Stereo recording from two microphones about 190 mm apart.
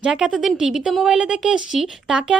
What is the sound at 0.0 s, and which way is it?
A woman's voice, 5° right (ahead or behind).